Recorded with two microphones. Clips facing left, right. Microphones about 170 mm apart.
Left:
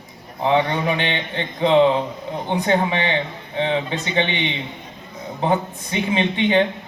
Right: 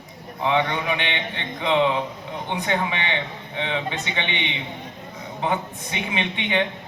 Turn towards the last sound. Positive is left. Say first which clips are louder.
# left 6 dB
turn(degrees=35)  # may be behind; listen again after turning